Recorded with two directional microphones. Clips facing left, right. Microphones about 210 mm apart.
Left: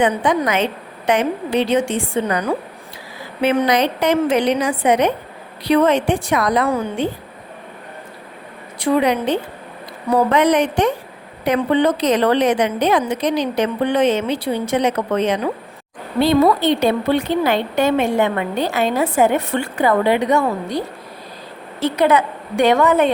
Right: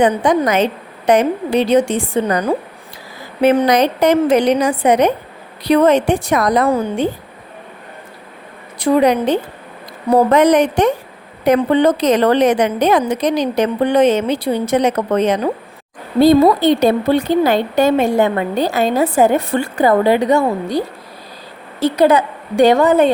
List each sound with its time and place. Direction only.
0.0 s a woman's voice: 40° right (ahead or behind)
8.8 s a woman's voice: 40° right (ahead or behind)
16.4 s a woman's voice: 35° right (ahead or behind)
21.8 s a woman's voice: 35° right (ahead or behind)